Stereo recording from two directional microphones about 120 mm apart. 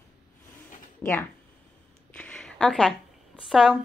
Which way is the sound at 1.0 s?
15° left (ahead or behind).